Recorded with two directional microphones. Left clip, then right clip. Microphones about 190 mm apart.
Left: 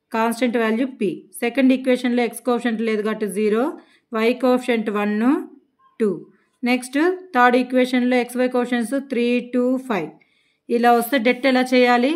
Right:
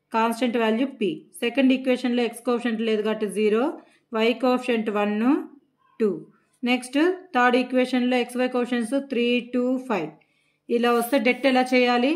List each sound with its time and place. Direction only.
0.1 s a woman's voice: 25° left (ahead or behind)
6.6 s a woman's voice: 25° left (ahead or behind)